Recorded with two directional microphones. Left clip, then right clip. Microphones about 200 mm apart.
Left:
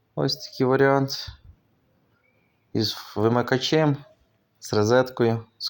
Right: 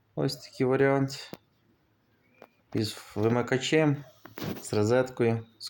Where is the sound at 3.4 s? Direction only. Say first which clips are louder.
Left 5 dB; 5° right (ahead or behind).